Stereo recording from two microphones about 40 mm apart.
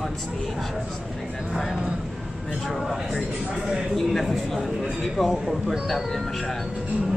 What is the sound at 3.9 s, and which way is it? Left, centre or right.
Speech, centre.